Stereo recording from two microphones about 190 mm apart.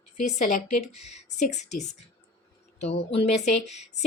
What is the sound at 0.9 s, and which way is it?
Speech, 35° left (ahead or behind).